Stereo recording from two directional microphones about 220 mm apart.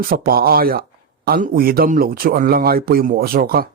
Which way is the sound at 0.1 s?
45° right (ahead or behind).